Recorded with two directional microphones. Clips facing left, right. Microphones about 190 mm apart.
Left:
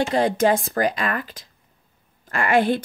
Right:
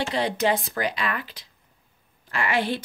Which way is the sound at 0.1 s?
45° left (ahead or behind).